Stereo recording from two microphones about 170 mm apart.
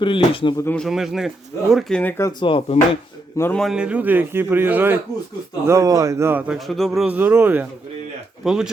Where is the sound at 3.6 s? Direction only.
5° right (ahead or behind).